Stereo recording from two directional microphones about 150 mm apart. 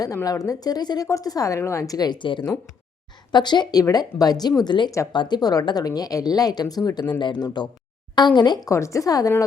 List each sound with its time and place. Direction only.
0.0 s speech: 20° left (ahead or behind)